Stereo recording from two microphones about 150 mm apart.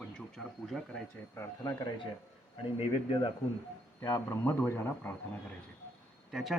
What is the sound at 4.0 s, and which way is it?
Speech, 20° left (ahead or behind).